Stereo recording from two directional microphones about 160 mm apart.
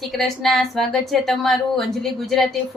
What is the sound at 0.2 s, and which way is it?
Speech, centre (ahead or behind).